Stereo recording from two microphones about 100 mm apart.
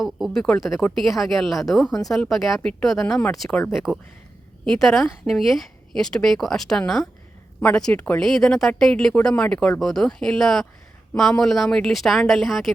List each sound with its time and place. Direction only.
0.0 s speech: centre (ahead or behind)
8.2 s speech: 5° left (ahead or behind)